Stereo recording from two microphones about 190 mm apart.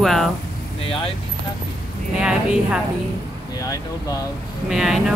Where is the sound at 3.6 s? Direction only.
20° left (ahead or behind).